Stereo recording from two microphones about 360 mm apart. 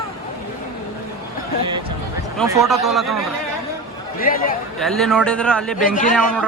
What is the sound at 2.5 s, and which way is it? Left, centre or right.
Speech, centre.